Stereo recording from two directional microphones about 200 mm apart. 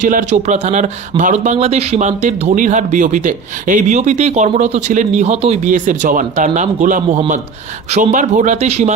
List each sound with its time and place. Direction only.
0.0 s speech: 40° right (ahead or behind)